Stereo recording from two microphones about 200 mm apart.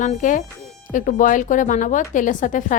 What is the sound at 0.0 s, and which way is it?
A woman's voice, 40° left (ahead or behind).